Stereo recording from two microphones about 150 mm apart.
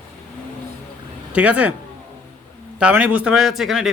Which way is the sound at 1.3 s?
10° right (ahead or behind).